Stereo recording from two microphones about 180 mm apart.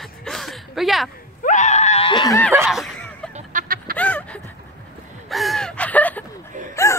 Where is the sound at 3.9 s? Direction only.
5° left (ahead or behind).